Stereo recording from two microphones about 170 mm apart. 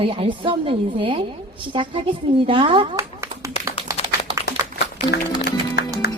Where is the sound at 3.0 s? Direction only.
20° right (ahead or behind).